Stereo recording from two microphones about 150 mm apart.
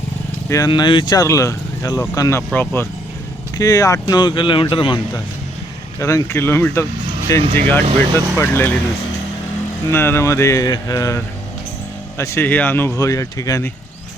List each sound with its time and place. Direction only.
0.4 s speech: 20° left (ahead or behind)
0.7 s speech: 30° left (ahead or behind)
6.0 s speech: 20° left (ahead or behind)
9.9 s speech: 15° left (ahead or behind)